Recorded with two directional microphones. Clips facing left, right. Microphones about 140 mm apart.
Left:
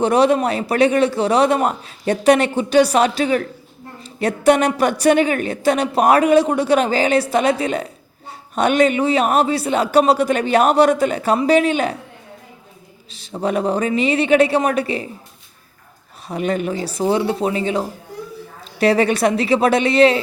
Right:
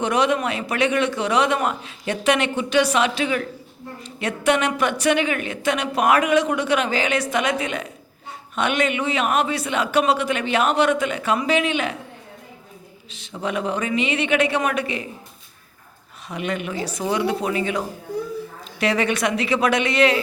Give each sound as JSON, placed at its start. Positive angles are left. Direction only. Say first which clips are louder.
{"t": 0.0, "sound": "a woman's voice", "louder": "left 6 dB", "side_deg": 35}
{"t": 13.1, "sound": "a woman's voice", "louder": "left 6 dB", "side_deg": 35}
{"t": 16.3, "sound": "a woman's voice", "louder": "left 6 dB", "side_deg": 35}